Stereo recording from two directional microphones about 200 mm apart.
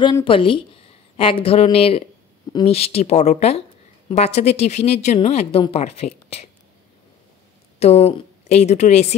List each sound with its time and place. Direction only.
0.0 s a woman's voice: 25° left (ahead or behind)
7.8 s a woman's voice: 30° left (ahead or behind)